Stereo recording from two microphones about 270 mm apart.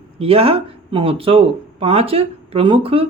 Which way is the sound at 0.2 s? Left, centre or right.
Right.